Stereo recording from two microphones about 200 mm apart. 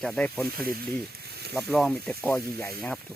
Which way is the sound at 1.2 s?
55° right (ahead or behind).